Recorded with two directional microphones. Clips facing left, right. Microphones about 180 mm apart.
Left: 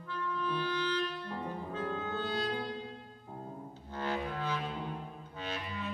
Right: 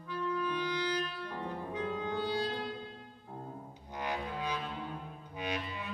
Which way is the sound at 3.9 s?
15° right (ahead or behind).